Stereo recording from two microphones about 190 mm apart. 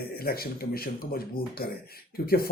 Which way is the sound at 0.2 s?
55° left (ahead or behind).